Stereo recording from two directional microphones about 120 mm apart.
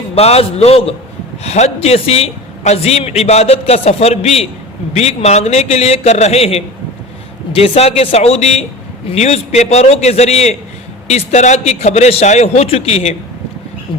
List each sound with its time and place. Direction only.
0.1 s a man's voice: 60° left (ahead or behind)
11.1 s a man's voice: 75° left (ahead or behind)